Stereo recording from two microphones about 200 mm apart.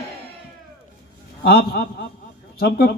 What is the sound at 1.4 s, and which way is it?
A man's voice, 50° left (ahead or behind).